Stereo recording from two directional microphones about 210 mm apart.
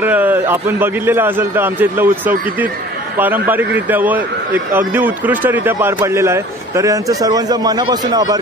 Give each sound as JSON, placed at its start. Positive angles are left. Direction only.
{"t": 0.0, "sound": "a man's voice", "side_deg": -10}